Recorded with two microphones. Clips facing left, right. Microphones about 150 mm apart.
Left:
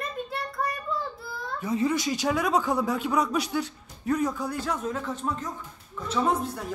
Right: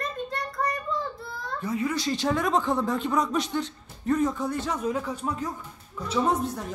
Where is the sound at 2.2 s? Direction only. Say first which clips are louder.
Right 1 dB; 5° left (ahead or behind).